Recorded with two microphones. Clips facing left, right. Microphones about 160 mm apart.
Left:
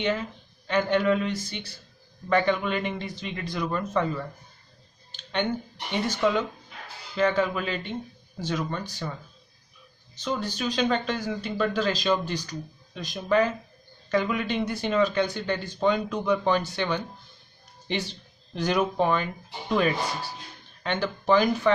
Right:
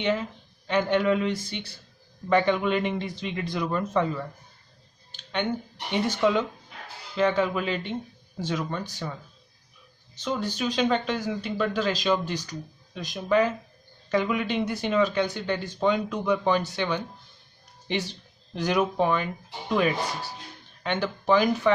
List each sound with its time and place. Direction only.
0.7 s a man's voice: 20° right (ahead or behind)
5.3 s a man's voice: 10° right (ahead or behind)
10.2 s speech: 20° right (ahead or behind)